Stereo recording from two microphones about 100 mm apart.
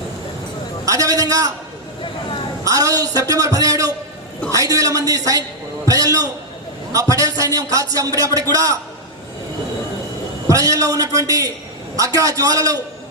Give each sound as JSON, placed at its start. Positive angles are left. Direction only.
{"t": 0.9, "sound": "a man's voice", "side_deg": -35}
{"t": 2.6, "sound": "a man's voice", "side_deg": -35}
{"t": 10.5, "sound": "a man's voice", "side_deg": -35}